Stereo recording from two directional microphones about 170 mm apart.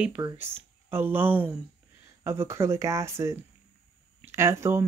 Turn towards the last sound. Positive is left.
turn(degrees=-15)  # may be behind; listen again after turning